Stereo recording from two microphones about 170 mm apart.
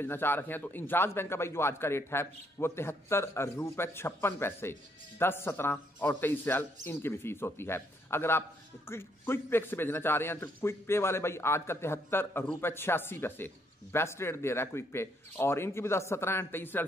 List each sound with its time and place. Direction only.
0.0 s speech: 10° left (ahead or behind)